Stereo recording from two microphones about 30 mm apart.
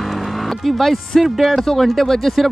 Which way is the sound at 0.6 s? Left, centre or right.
Centre.